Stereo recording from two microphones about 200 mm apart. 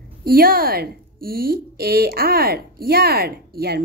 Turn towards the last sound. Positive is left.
turn(degrees=-50)  # may be behind; listen again after turning